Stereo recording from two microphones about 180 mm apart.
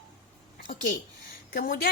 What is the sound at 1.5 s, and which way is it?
Speech, 55° left (ahead or behind).